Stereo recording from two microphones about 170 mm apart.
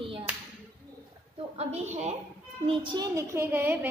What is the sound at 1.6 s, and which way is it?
Speech, 40° right (ahead or behind).